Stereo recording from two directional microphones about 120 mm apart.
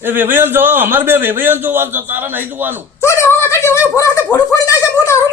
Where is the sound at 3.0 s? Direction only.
20° left (ahead or behind).